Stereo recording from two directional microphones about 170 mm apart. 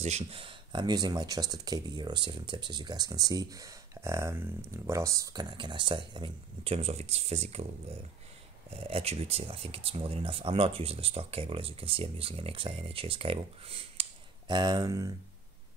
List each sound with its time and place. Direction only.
0.0 s speech: 35° right (ahead or behind); by 15.1 s 20° right (ahead or behind)